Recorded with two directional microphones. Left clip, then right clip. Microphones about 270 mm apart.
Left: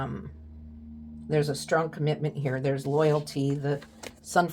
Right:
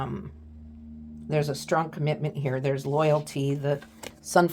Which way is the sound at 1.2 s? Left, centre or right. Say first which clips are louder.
Even; right.